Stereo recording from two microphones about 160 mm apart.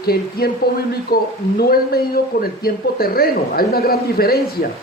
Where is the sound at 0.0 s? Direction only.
75° left (ahead or behind).